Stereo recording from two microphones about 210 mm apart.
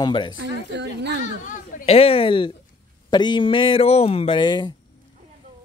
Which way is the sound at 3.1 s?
20° left (ahead or behind).